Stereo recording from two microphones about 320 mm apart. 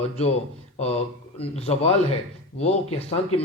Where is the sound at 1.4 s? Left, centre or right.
Centre.